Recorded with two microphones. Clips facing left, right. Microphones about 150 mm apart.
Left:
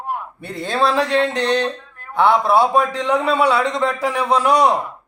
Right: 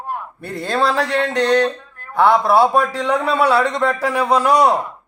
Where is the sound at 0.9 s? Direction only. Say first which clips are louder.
Left 1 dB; 25° left (ahead or behind).